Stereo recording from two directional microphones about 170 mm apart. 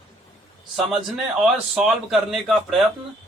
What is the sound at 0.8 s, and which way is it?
A man's voice, centre (ahead or behind).